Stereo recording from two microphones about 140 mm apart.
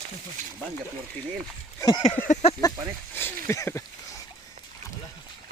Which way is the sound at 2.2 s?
15° left (ahead or behind).